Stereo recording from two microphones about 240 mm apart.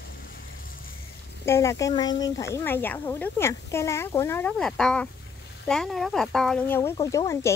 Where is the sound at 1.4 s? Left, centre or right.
Centre.